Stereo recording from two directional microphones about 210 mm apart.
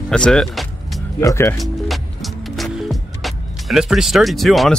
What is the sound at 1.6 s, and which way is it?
Music, centre (ahead or behind).